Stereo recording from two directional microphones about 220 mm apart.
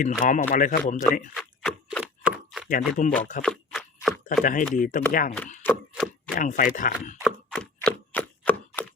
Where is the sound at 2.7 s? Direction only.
35° left (ahead or behind).